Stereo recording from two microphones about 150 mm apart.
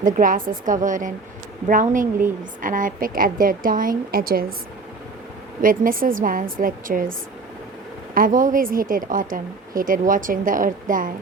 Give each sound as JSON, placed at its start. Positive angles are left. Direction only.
{"t": 0.0, "sound": "a woman's voice", "side_deg": -65}
{"t": 5.6, "sound": "a woman's voice", "side_deg": -65}
{"t": 8.1, "sound": "a woman's voice", "side_deg": -65}